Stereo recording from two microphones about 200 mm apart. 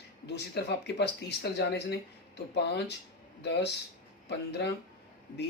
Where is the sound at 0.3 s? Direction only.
55° left (ahead or behind).